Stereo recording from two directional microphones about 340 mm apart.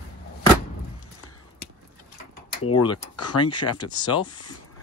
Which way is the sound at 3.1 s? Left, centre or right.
Left.